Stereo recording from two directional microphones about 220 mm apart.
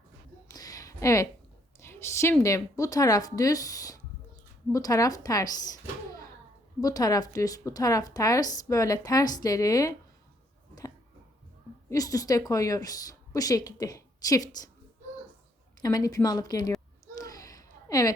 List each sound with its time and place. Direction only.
0.4 s a sound: 15° left (ahead or behind)
1.8 s a woman's voice: 10° left (ahead or behind)
6.7 s speech: 15° left (ahead or behind)
11.9 s speech: 15° left (ahead or behind)
15.8 s speech: 15° left (ahead or behind)
17.2 s a sound: 15° left (ahead or behind)